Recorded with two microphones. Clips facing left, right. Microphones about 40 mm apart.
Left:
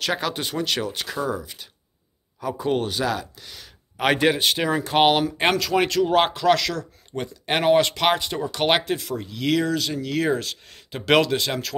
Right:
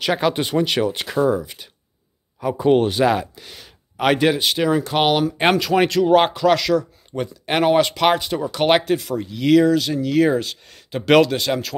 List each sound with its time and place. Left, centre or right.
0.0 s speech: centre
2.4 s speech: centre
3.3 s a sound: centre
4.0 s speech: centre
5.6 s speech: centre